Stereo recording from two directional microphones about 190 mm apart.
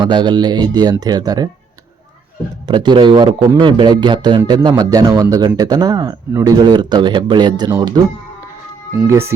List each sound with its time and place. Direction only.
0.0 s a man's voice: 25° right (ahead or behind)
2.6 s a man's voice: 25° right (ahead or behind)
9.0 s speech: 15° right (ahead or behind)